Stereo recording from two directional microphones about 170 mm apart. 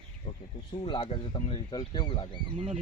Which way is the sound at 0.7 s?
30° left (ahead or behind).